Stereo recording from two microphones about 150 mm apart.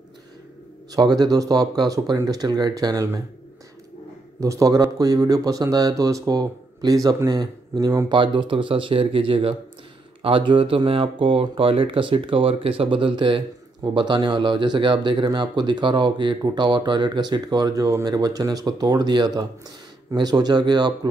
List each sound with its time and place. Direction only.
0.9 s speech: 25° right (ahead or behind)
4.4 s speech: 20° right (ahead or behind)